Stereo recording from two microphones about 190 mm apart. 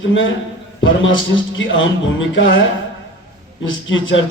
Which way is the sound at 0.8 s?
90° left.